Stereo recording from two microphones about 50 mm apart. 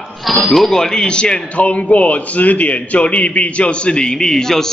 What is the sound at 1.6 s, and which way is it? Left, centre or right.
A man's voice, left.